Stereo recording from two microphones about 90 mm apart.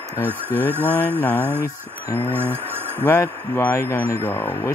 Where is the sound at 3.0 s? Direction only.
25° left (ahead or behind).